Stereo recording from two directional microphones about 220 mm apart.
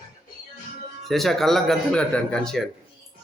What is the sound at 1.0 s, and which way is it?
Speech, centre (ahead or behind).